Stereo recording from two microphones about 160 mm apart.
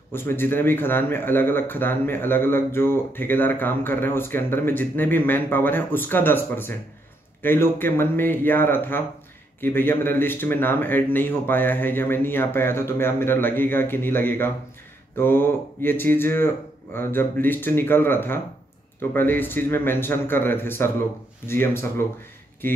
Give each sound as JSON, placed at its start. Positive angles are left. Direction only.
{"t": 0.1, "sound": "a man's voice", "side_deg": 15}